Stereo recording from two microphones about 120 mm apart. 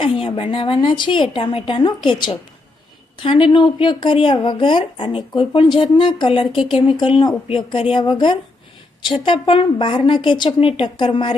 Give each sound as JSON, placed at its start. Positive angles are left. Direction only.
{"t": 0.0, "sound": "a woman's voice", "side_deg": 45}